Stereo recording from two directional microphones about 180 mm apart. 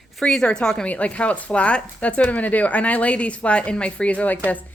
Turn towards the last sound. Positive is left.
turn(degrees=10)  # may be behind; listen again after turning